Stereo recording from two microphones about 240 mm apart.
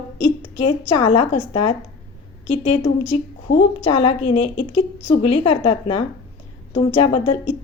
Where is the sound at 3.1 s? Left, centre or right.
Left.